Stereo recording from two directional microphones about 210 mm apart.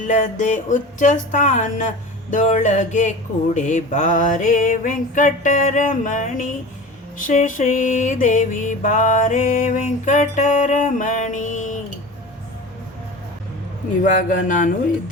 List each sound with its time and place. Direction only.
0.0 s music: 35° left (ahead or behind)
14.0 s music: 40° left (ahead or behind)